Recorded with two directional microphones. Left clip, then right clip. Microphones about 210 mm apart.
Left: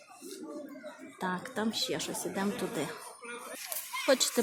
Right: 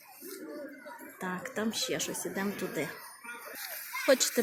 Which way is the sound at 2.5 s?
45° left (ahead or behind).